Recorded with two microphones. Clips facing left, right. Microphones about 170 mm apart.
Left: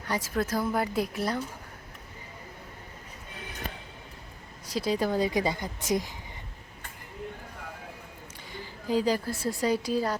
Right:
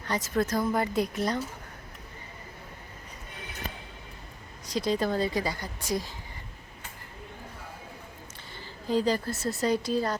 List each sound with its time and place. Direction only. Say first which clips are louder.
0.1 s speech: right 1 dB; 10° left (ahead or behind)
4.7 s speech: even; 5° left (ahead or behind)
8.5 s a woman's voice: even; 10° left (ahead or behind)